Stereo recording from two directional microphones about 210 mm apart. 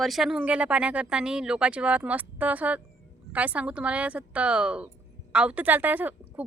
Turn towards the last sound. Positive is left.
turn(degrees=-10)  # may be behind; listen again after turning